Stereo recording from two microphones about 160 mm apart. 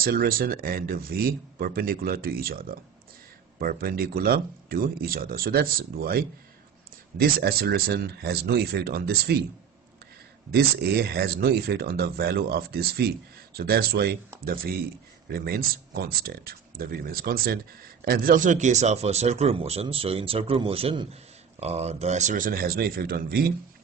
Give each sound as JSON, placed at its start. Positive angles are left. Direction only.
{"t": 0.0, "sound": "speech", "side_deg": -65}
{"t": 10.5, "sound": "speech", "side_deg": -85}
{"t": 14.4, "sound": "a man's voice", "side_deg": -65}